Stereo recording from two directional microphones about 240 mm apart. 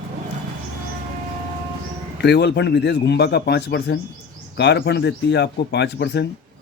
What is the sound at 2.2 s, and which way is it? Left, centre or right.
Speech, left.